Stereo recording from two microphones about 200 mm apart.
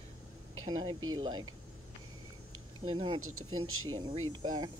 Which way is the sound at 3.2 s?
90° right.